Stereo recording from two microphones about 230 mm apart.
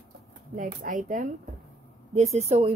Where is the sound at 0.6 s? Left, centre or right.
Right.